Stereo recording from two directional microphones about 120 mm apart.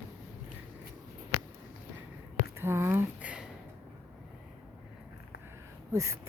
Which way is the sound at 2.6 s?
20° right (ahead or behind).